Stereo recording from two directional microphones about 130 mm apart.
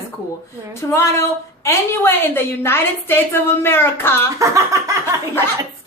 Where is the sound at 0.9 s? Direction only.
20° left (ahead or behind).